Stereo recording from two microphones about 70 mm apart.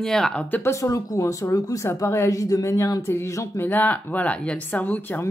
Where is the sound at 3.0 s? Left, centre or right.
Left.